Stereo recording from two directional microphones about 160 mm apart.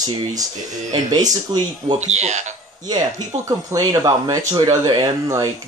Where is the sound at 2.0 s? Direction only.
45° right (ahead or behind).